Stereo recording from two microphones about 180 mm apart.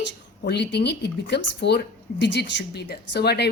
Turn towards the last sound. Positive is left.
turn(degrees=65)  # may be behind; listen again after turning